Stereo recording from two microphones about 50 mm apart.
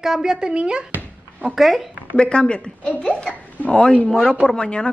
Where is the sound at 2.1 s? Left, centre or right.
Centre.